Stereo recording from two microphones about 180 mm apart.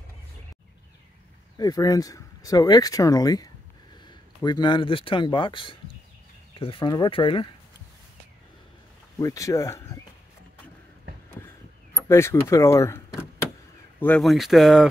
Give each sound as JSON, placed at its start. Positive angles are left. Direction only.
{"t": 1.6, "sound": "speech", "side_deg": 20}
{"t": 9.2, "sound": "speech", "side_deg": 20}
{"t": 12.1, "sound": "speech", "side_deg": 15}